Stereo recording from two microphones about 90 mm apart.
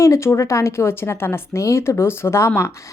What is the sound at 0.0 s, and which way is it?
A woman's voice, 30° left (ahead or behind).